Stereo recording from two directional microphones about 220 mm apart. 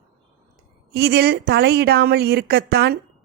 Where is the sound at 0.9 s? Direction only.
45° right (ahead or behind).